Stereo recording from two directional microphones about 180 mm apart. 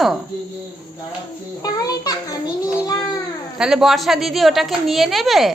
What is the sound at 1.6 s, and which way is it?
A child's voice, 20° left (ahead or behind).